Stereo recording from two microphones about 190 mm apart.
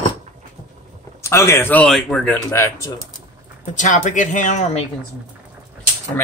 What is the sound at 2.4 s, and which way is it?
Speech, 15° left (ahead or behind).